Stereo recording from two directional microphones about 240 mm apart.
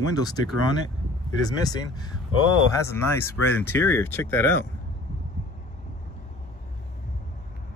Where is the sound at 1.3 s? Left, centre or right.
Centre.